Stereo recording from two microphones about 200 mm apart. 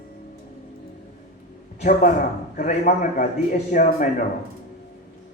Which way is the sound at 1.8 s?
40° left (ahead or behind).